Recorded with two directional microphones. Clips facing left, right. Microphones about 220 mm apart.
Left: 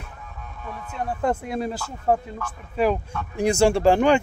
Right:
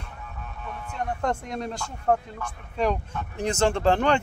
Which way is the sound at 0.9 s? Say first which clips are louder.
Left 3 dB; 5° left (ahead or behind).